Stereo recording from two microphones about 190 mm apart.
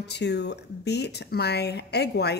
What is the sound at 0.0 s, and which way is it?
Speech, 65° left (ahead or behind).